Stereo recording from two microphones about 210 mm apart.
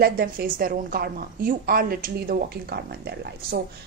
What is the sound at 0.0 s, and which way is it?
A woman's voice, 45° right (ahead or behind).